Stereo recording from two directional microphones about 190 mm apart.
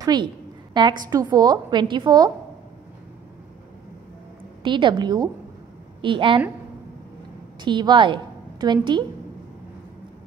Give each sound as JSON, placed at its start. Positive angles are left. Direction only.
{"t": 0.0, "sound": "a woman's voice", "side_deg": -20}
{"t": 4.6, "sound": "a woman's voice", "side_deg": -25}
{"t": 7.6, "sound": "a woman's voice", "side_deg": -25}